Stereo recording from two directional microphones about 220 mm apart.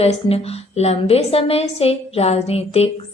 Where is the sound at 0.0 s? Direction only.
30° left (ahead or behind).